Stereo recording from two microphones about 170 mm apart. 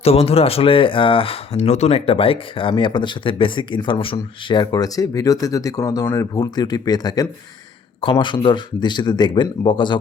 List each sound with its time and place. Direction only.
0.0 s speech: 35° left (ahead or behind)